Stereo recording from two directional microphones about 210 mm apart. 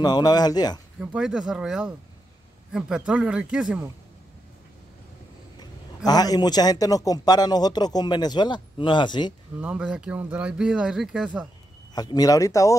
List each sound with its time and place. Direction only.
0.0 s a man's voice: 20° left (ahead or behind)
1.0 s speech: 5° right (ahead or behind)
5.6 s a man's voice: 20° left (ahead or behind)
9.6 s speech: 5° right (ahead or behind)
11.9 s speech: 20° left (ahead or behind)